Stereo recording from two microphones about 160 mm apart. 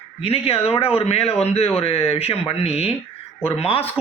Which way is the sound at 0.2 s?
35° left (ahead or behind).